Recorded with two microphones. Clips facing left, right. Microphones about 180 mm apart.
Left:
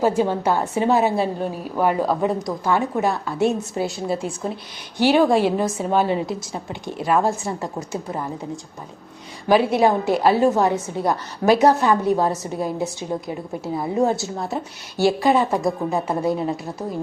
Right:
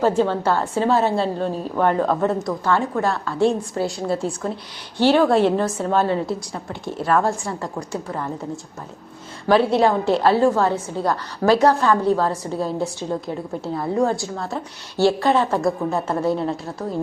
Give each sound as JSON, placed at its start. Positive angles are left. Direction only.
{"t": 0.0, "sound": "a woman's voice", "side_deg": 15}
{"t": 9.5, "sound": "a woman's voice", "side_deg": 15}